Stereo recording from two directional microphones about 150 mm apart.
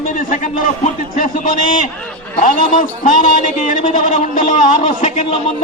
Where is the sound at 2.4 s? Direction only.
60° left (ahead or behind).